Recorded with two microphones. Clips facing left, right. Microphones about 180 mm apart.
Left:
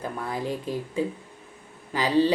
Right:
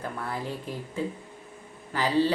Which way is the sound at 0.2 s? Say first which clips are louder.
Left 5 dB; 15° left (ahead or behind).